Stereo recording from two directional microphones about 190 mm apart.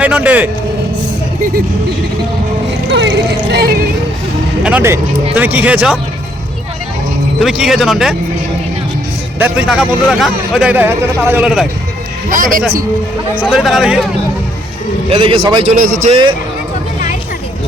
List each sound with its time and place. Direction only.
0.0 s speech: 5° right (ahead or behind)
3.5 s speech: 55° right (ahead or behind)
4.6 s speech: 10° right (ahead or behind)
7.3 s a man's voice: centre (ahead or behind)
9.4 s a man's voice: 5° right (ahead or behind)
12.3 s a man's voice: 45° right (ahead or behind)
13.4 s a man's voice: centre (ahead or behind)
15.1 s a man's voice: 30° right (ahead or behind)
15.6 s a man's voice: 45° right (ahead or behind)
16.0 s a man's voice: 30° right (ahead or behind)